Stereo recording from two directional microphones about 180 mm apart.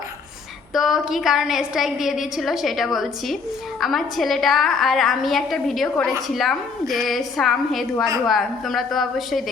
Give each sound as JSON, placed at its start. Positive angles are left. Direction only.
{"t": 0.7, "sound": "a woman's voice", "side_deg": 0}